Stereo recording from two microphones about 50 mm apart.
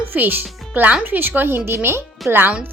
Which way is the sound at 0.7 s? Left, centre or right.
Right.